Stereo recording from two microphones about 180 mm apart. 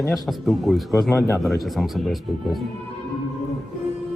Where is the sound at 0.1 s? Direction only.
Centre (ahead or behind).